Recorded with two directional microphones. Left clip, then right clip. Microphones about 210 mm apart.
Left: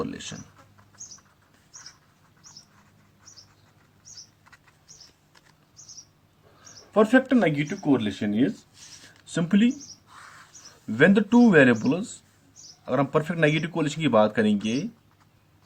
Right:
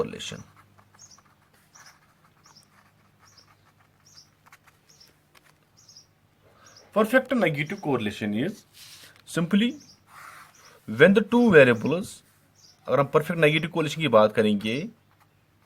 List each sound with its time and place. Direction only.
0.0 s speech: 50° right (ahead or behind)
6.6 s speech: 45° right (ahead or behind)
10.1 s bird: 15° right (ahead or behind)
10.9 s speech: 45° right (ahead or behind)